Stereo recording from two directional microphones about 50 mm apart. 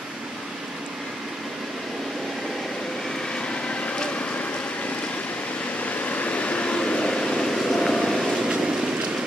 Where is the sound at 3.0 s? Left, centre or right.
Centre.